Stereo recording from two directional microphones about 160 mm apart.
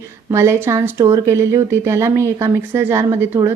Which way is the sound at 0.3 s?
15° right (ahead or behind).